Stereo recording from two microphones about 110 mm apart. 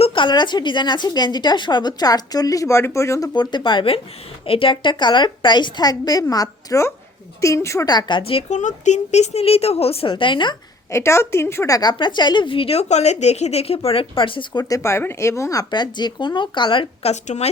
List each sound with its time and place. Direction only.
0.0 s speech: 50° left (ahead or behind); by 3.2 s 25° left (ahead or behind)
3.3 s a woman's voice: 45° left (ahead or behind); by 7.9 s 25° left (ahead or behind)
7.9 s a woman's voice: 40° left (ahead or behind); by 10.1 s 65° left (ahead or behind)
10.1 s a woman's voice: 45° left (ahead or behind)
10.9 s a woman's voice: 25° left (ahead or behind); by 14.6 s 50° left (ahead or behind)
14.6 s speech: 30° left (ahead or behind)
15.7 s a woman's voice: 40° left (ahead or behind)
17.0 s speech: 80° left